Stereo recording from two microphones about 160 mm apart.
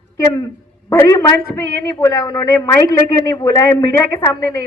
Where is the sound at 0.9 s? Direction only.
20° left (ahead or behind).